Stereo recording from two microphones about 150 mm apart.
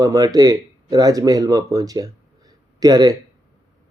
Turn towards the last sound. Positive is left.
turn(degrees=-25)  # may be behind; listen again after turning